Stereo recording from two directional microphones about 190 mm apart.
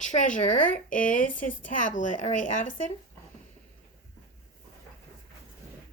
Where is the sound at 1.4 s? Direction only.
45° left (ahead or behind).